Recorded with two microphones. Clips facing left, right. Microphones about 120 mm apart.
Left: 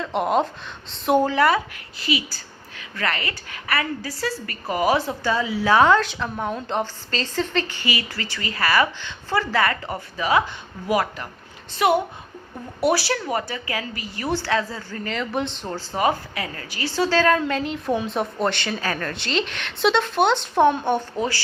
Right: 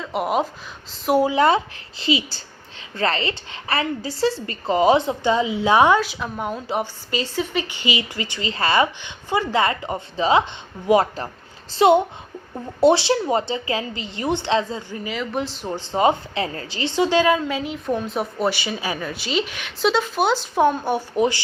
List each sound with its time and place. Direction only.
0.0 s a woman's voice: 5° right (ahead or behind)
1.4 s speech: 25° right (ahead or behind); by 15.7 s 5° right (ahead or behind)
15.7 s a woman's voice: 20° right (ahead or behind); by 21.0 s 5° right (ahead or behind)
21.2 s speech: 20° right (ahead or behind)